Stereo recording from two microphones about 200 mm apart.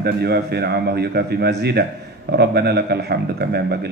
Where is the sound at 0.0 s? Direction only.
55° right (ahead or behind).